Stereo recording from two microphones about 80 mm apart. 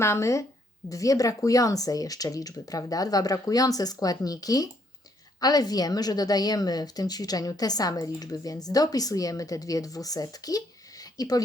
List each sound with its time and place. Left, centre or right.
0.0 s a woman's voice: left